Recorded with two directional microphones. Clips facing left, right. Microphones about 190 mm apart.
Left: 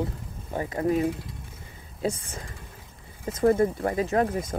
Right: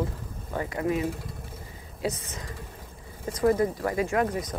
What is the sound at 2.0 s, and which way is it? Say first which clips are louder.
Speech: left 2 dB; 30° left (ahead or behind).